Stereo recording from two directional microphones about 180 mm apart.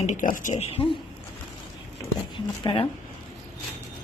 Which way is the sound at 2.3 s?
25° left (ahead or behind).